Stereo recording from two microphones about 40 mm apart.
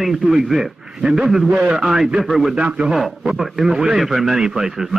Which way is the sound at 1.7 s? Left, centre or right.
Centre.